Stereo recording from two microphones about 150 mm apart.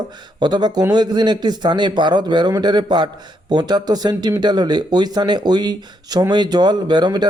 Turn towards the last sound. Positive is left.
turn(degrees=-30)  # may be behind; listen again after turning